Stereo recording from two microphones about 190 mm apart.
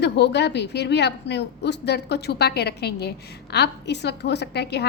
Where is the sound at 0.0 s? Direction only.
65° left (ahead or behind).